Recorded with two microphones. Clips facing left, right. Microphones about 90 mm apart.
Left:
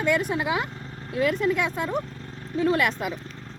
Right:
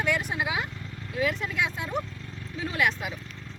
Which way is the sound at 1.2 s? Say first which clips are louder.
Left 5 dB; 50° left (ahead or behind).